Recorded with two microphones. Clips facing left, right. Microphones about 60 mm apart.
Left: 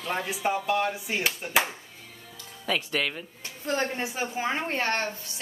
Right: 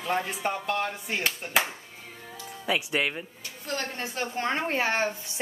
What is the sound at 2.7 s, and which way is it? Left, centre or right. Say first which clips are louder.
Speech: right 1 dB; centre.